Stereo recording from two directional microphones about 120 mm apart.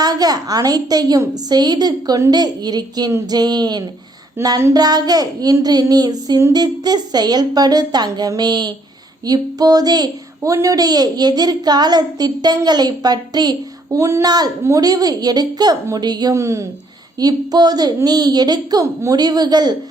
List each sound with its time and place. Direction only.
0.0 s child singing: 30° right (ahead or behind)
16.3 s a woman's voice: 25° right (ahead or behind)
17.2 s child singing: 35° right (ahead or behind)